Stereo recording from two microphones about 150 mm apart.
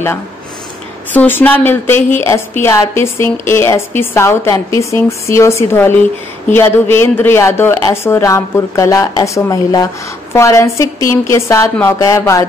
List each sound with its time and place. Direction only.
1.1 s a woman's voice: 10° left (ahead or behind)